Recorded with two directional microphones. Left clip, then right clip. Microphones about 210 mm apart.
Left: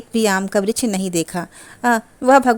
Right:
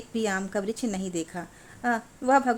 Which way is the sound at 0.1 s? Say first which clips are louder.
Left 11 dB; 45° left (ahead or behind).